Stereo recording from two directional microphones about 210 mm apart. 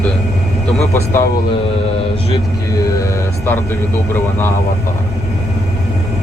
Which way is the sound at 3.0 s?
10° left (ahead or behind).